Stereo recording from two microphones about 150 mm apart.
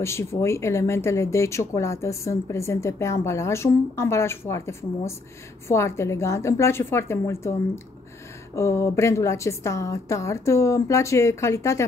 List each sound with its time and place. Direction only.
0.0 s a woman's voice: 20° left (ahead or behind)